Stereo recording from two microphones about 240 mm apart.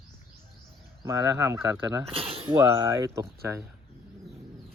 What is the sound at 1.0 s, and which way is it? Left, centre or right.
Speech, centre.